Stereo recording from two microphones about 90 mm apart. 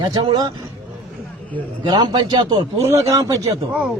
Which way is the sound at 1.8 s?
55° right (ahead or behind).